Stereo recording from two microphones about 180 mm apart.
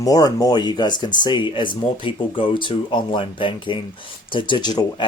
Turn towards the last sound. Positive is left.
turn(degrees=25)  # may be behind; listen again after turning